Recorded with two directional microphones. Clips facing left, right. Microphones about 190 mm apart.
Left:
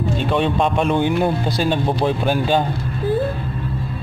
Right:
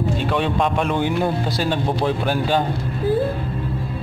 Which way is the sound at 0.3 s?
25° left (ahead or behind).